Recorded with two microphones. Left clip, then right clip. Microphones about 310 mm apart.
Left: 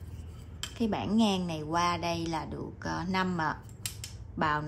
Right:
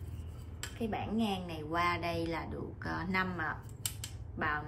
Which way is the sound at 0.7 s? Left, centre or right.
Centre.